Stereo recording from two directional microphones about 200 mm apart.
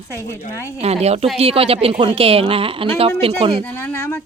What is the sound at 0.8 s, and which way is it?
A woman's voice, 30° right (ahead or behind).